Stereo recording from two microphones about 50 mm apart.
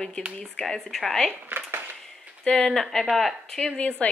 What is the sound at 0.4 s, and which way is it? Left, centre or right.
Speech, centre.